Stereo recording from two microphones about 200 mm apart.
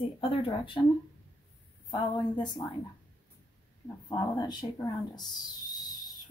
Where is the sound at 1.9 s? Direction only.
20° left (ahead or behind).